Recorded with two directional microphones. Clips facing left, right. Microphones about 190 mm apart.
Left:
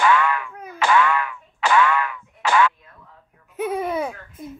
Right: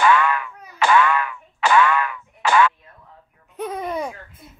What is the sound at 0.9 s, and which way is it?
Boing, 55° right (ahead or behind).